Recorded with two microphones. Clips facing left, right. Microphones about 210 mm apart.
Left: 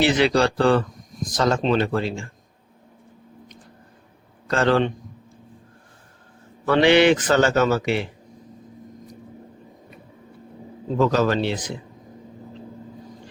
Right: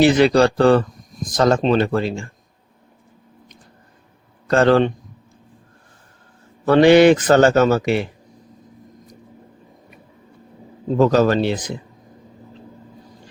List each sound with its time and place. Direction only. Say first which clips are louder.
0.0 s a man's voice: right 5 dB; 45° right (ahead or behind)
4.4 s a man's voice: right 5 dB; 45° right (ahead or behind)
6.7 s a man's voice: right 5 dB; 45° right (ahead or behind)
10.9 s a man's voice: right 5 dB; 40° right (ahead or behind)